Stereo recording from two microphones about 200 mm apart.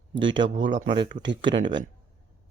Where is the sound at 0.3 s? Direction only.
25° right (ahead or behind).